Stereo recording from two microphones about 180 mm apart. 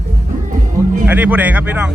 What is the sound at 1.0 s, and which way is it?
Speech, 10° right (ahead or behind).